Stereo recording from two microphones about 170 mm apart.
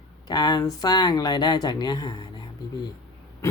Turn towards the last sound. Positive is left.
turn(degrees=20)  # may be behind; listen again after turning